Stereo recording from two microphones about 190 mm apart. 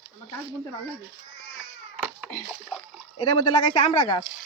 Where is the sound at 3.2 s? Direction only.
25° left (ahead or behind).